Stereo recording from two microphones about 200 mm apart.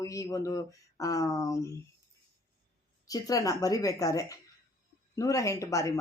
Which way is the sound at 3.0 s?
15° left (ahead or behind).